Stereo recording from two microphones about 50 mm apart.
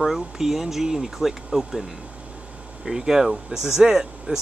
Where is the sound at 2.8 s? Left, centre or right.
Centre.